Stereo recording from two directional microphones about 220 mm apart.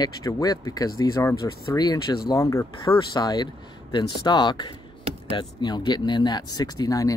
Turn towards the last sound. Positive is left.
turn(degrees=15)  # may be behind; listen again after turning